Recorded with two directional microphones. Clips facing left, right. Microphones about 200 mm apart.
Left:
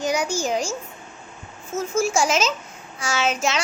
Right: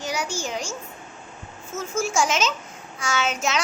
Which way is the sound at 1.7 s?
35° left (ahead or behind).